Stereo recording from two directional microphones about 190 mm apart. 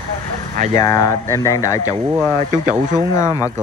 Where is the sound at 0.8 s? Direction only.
20° left (ahead or behind).